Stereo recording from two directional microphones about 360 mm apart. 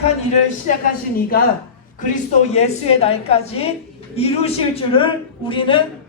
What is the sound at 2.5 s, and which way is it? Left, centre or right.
A woman's voice, centre.